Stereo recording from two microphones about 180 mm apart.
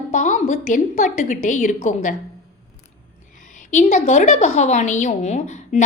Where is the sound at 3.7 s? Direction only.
40° left (ahead or behind).